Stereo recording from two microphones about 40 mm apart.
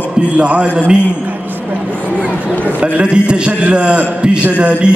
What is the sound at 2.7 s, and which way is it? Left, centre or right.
Speech, right.